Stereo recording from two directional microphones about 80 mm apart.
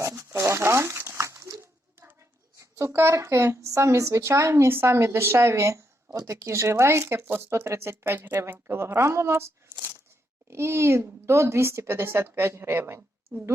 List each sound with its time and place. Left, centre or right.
0.0 s a sound: right
0.3 s crumpling: right
2.6 s speech: right